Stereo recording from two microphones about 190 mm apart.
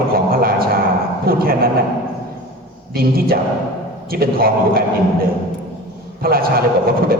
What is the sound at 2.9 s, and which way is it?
A man's voice, 50° right (ahead or behind).